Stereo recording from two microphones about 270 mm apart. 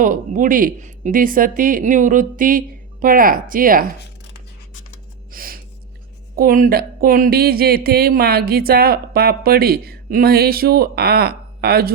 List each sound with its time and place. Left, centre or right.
0.0 s speech: right
5.3 s a sound: right
6.3 s speech: right